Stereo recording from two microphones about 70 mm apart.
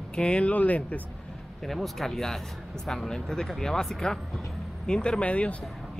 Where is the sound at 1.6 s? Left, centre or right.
Centre.